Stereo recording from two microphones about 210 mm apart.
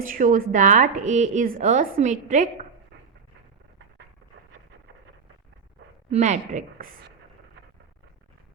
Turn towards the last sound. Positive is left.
turn(degrees=-35)  # may be behind; listen again after turning